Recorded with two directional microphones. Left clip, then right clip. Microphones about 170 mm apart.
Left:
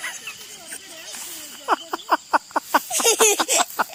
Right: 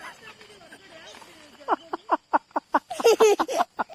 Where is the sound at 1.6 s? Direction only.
5° right (ahead or behind).